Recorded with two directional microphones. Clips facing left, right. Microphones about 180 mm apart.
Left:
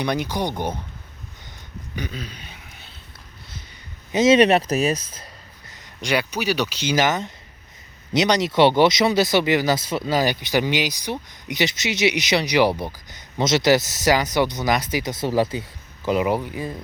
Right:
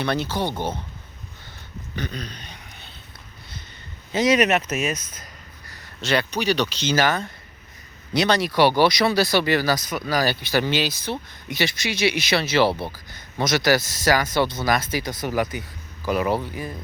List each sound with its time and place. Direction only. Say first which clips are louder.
0.0 s speech: left 1 dB; 15° left (ahead or behind)
2.0 s a sound: even; 5° left (ahead or behind)
4.1 s speech: left 4 dB; 25° left (ahead or behind)